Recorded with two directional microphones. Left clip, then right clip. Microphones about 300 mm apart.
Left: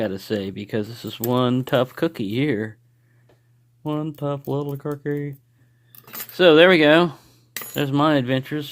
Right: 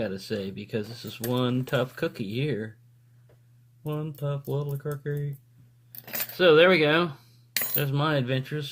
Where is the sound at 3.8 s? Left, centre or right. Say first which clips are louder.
Left 7 dB; left.